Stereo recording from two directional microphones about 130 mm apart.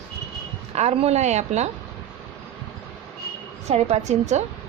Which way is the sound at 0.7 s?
55° right (ahead or behind).